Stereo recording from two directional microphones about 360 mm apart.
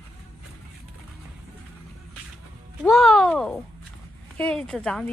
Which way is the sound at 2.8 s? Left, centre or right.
Centre.